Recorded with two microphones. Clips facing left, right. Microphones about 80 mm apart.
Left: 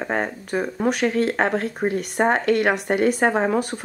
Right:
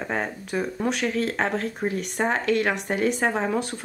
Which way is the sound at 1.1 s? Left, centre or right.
Centre.